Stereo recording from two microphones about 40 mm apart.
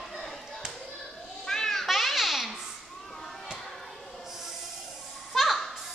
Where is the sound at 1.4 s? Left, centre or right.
Centre.